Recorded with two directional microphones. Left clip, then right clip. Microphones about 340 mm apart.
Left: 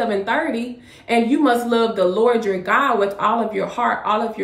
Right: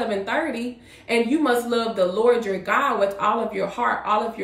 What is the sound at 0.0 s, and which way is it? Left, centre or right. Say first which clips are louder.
A woman's voice: left 4 dB; centre.